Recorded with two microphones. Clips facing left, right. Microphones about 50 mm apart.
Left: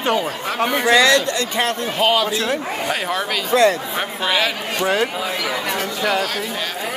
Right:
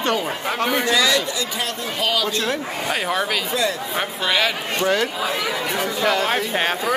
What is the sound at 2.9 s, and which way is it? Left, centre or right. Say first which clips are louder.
Speech: right 1 dB; centre.